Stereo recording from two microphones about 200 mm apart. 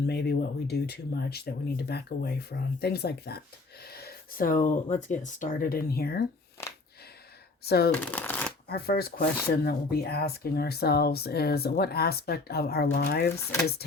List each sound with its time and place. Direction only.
0.1 s speech: 55° left (ahead or behind)
7.6 s speech: 50° left (ahead or behind)
7.9 s shuffling cards: 10° left (ahead or behind)
8.7 s speech: 50° left (ahead or behind)